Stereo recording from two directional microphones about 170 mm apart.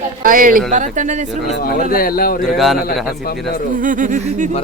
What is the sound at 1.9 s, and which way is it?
Speech, 60° left (ahead or behind).